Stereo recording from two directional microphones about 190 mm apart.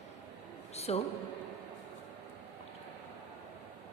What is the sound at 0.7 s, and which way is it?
Speech, 35° left (ahead or behind).